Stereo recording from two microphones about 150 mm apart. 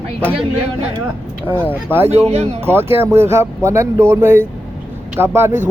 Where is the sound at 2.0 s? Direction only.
45° right (ahead or behind).